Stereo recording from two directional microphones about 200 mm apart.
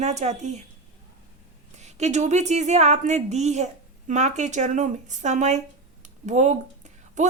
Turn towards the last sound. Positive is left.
turn(degrees=-35)  # may be behind; listen again after turning